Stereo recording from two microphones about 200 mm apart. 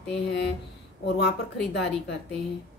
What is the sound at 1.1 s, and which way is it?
A woman's voice, 55° left (ahead or behind).